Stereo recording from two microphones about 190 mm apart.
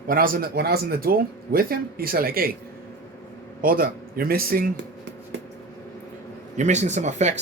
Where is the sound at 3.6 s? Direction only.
50° right (ahead or behind).